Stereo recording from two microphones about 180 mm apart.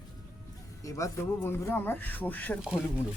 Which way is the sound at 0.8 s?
15° left (ahead or behind).